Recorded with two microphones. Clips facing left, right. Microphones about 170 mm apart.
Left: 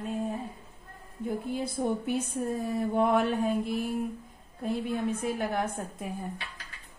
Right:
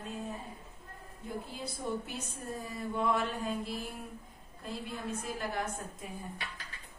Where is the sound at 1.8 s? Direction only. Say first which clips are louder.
Left 8 dB; 55° left (ahead or behind).